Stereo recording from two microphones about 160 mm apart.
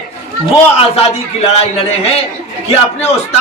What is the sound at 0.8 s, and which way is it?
A man's voice, 40° left (ahead or behind).